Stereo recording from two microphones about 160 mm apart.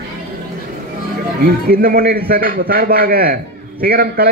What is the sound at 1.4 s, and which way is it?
A man's voice, 65° right (ahead or behind).